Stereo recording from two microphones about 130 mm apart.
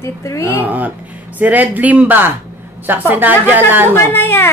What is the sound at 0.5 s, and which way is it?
A woman's voice, 15° right (ahead or behind).